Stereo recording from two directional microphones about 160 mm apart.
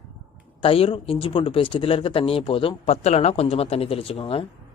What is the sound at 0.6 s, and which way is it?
Speech, 35° left (ahead or behind).